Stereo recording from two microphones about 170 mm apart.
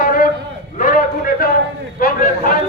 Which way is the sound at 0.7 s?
50° left (ahead or behind).